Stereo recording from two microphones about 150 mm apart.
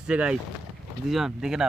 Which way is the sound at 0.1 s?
5° right (ahead or behind).